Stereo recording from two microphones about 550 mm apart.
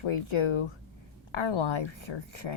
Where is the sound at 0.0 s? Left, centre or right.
Left.